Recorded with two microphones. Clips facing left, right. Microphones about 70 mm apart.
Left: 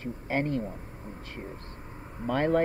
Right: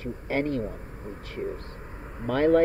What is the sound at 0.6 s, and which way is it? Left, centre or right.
Speech, right.